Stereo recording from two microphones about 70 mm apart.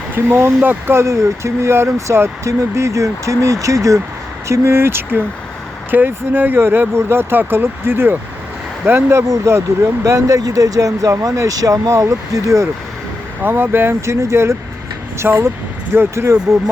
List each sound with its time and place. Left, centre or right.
0.3 s speech: right
9.2 s speech: right
13.4 s speech: right